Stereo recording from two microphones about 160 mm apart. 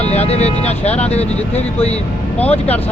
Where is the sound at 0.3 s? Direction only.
45° left (ahead or behind).